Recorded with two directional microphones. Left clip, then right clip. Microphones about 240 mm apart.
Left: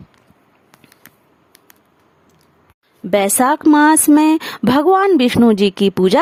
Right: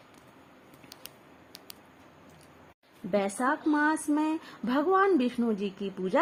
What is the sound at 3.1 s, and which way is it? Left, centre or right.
A woman's voice, left.